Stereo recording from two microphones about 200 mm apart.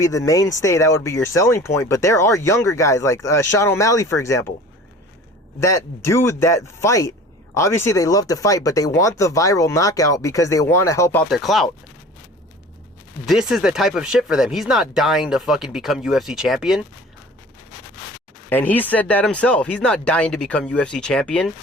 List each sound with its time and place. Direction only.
0.0 s speech: 15° left (ahead or behind)
5.5 s speech: 15° left (ahead or behind)
13.2 s speech: centre (ahead or behind)
18.4 s speech: 10° left (ahead or behind)